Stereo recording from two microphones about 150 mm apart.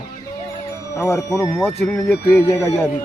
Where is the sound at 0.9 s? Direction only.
20° left (ahead or behind).